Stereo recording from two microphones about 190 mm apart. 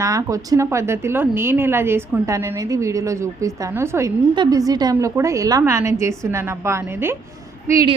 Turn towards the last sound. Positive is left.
turn(degrees=-20)  # may be behind; listen again after turning